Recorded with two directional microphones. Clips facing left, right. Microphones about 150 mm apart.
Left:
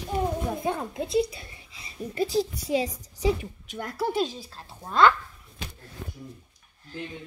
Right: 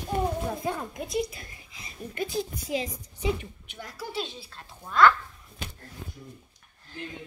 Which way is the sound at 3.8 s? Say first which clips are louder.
Left 8 dB; 60° left (ahead or behind).